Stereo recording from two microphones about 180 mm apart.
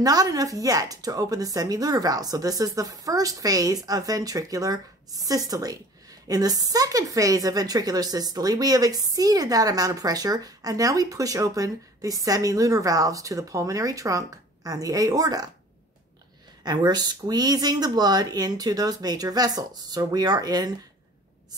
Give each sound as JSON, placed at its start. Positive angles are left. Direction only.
{"t": 0.0, "sound": "a woman's voice", "side_deg": -20}
{"t": 16.6, "sound": "a woman's voice", "side_deg": -25}